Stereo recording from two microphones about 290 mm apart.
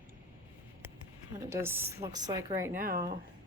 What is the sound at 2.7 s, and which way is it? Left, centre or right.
Speech, right.